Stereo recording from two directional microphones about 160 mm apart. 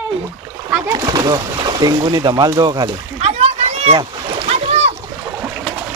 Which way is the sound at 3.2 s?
40° right (ahead or behind).